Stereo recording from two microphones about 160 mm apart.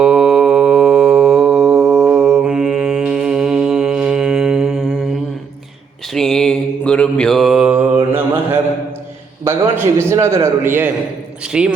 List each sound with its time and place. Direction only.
0.0 s mantra: 5° right (ahead or behind)
6.1 s mantra: 5° left (ahead or behind)
9.4 s a man's voice: 15° right (ahead or behind)